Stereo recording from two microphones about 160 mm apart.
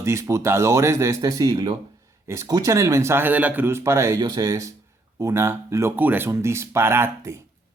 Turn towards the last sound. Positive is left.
turn(degrees=-15)  # may be behind; listen again after turning